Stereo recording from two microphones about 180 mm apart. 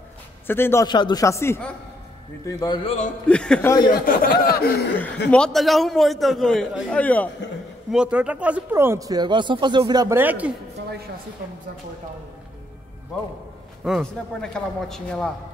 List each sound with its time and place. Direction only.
0.5 s a man's voice: 15° left (ahead or behind)
0.8 s a man's voice: 25° left (ahead or behind)
2.4 s a man's voice: 25° left (ahead or behind)
3.3 s a man's voice: 5° left (ahead or behind)
4.0 s speech: 55° left (ahead or behind)
5.3 s a man's voice: 5° left (ahead or behind)
7.9 s speech: 5° right (ahead or behind); by 10.1 s 20° right (ahead or behind)
10.1 s speech: 10° right (ahead or behind)
13.8 s a man's voice: centre (ahead or behind)